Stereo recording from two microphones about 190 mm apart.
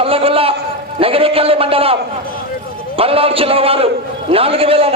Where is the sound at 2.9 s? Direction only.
30° right (ahead or behind).